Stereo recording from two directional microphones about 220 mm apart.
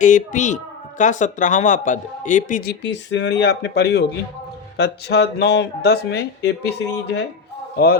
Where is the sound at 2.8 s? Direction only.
55° left (ahead or behind).